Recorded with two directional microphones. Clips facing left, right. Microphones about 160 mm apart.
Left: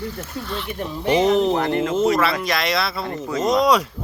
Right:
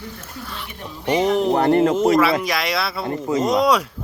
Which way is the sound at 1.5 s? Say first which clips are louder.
Right 5 dB; 40° right (ahead or behind).